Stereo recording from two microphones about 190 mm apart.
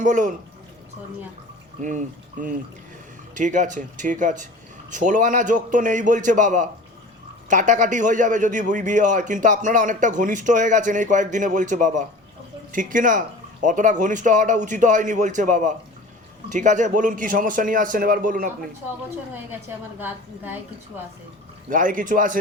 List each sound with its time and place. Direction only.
0.0 s a man's voice: 40° right (ahead or behind)
1.8 s a man's voice: 40° right (ahead or behind)
19.5 s a woman's voice: 10° right (ahead or behind)
21.7 s a man's voice: 45° right (ahead or behind)